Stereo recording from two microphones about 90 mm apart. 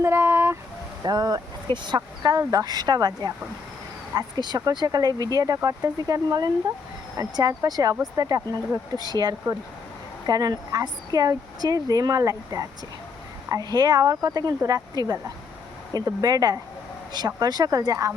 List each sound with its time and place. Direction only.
0.0 s a sound: 25° right (ahead or behind)
1.0 s speech: 50° right (ahead or behind)
2.4 s speech: 40° right (ahead or behind)
4.1 s speech: 50° right (ahead or behind)